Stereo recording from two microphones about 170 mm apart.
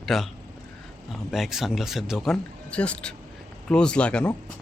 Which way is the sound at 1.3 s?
Centre (ahead or behind).